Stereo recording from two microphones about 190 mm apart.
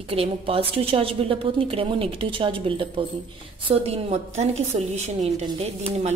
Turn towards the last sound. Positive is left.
turn(degrees=-30)  # may be behind; listen again after turning